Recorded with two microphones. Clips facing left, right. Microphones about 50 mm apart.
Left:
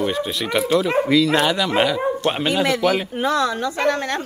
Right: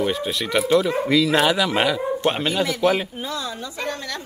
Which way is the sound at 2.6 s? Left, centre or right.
Left.